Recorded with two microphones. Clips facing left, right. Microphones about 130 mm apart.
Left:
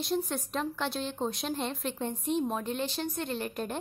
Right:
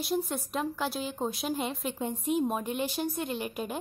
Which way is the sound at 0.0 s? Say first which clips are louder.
Even; 5° right (ahead or behind).